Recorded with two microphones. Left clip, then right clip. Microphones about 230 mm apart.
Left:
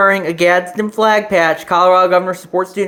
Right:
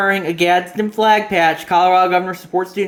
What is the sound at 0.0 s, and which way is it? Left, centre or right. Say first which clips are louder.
Speech: left 4 dB; centre.